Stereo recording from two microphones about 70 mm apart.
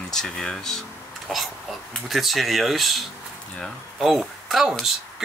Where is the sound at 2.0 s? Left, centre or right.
Centre.